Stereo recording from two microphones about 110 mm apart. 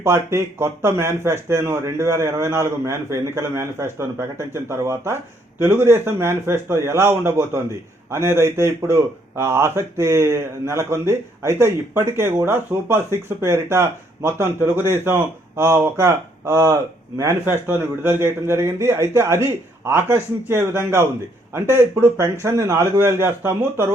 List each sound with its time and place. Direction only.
0.0 s a man's voice: 25° right (ahead or behind)